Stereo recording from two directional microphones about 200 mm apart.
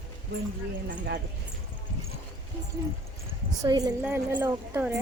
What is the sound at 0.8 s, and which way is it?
Speech, 55° right (ahead or behind).